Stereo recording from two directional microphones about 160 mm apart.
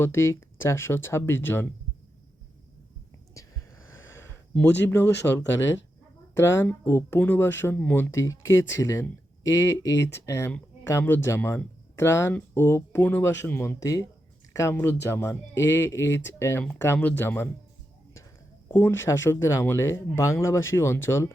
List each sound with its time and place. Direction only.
0.0 s speech: 15° left (ahead or behind)
3.8 s a sound: 15° left (ahead or behind)
4.9 s speech: 15° left (ahead or behind)
6.3 s speech: 15° left (ahead or behind)
18.7 s speech: 15° left (ahead or behind)